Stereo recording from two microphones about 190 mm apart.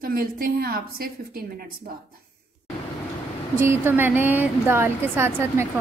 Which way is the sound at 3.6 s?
10° right (ahead or behind).